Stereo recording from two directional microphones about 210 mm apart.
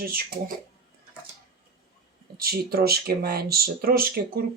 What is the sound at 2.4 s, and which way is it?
Speech, 45° right (ahead or behind).